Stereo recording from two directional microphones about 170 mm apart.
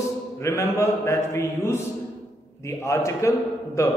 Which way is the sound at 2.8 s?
15° left (ahead or behind).